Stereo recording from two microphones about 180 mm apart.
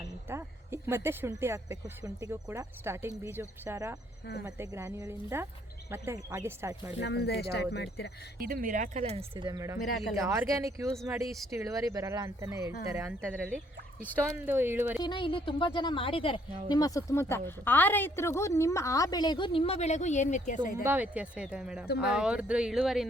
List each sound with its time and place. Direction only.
0.0 s speech: 15° right (ahead or behind)
7.0 s speech: 70° left (ahead or behind)
8.4 s speech: 55° right (ahead or behind); by 15.0 s 10° right (ahead or behind)
15.0 s a woman's voice: 25° left (ahead or behind); by 20.8 s 45° left (ahead or behind)
20.8 s speech: 10° right (ahead or behind)